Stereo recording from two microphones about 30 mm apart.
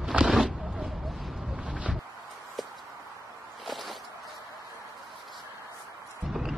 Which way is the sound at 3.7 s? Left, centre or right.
Centre.